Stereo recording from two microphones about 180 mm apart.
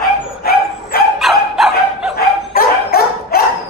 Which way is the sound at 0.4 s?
60° left (ahead or behind).